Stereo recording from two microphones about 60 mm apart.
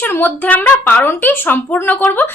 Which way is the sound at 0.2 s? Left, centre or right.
Left.